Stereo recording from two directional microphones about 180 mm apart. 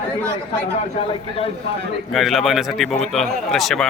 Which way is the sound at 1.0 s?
35° left (ahead or behind).